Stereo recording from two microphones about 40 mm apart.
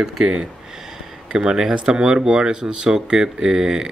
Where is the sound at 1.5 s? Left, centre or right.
Centre.